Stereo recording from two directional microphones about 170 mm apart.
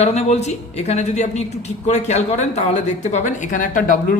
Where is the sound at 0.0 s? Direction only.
40° left (ahead or behind).